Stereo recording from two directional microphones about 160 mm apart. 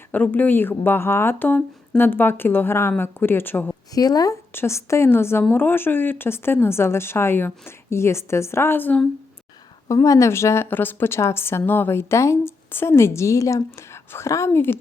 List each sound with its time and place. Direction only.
0.1 s speech: 10° left (ahead or behind)
3.9 s speech: 25° left (ahead or behind)